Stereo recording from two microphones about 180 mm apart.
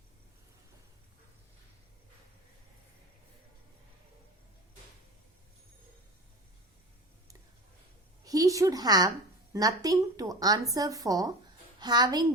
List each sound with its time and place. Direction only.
8.2 s a woman's voice: 20° right (ahead or behind)